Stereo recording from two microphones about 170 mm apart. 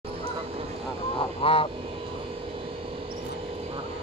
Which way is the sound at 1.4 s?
35° left (ahead or behind).